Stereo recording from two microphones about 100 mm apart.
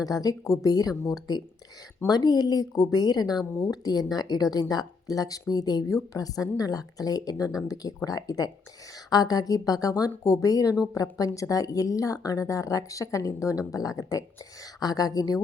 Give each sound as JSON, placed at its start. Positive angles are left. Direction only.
{"t": 0.0, "sound": "a woman's voice", "side_deg": 35}